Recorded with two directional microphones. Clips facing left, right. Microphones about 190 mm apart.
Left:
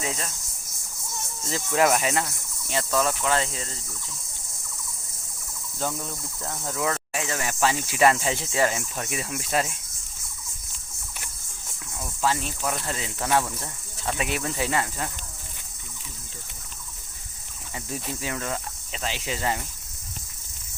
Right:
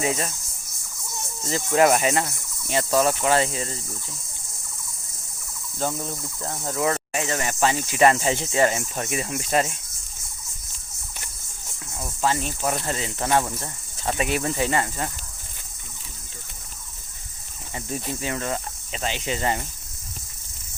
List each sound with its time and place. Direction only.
0.0 s speech: 10° right (ahead or behind)
1.5 s speech: centre (ahead or behind)
5.8 s speech: 25° right (ahead or behind)
6.7 s speech: 10° right (ahead or behind)
12.2 s speech: centre (ahead or behind)
17.7 s speech: centre (ahead or behind)